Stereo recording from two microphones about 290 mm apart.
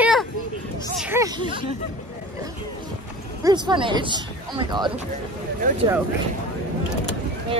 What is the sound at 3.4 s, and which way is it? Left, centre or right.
Speech, centre.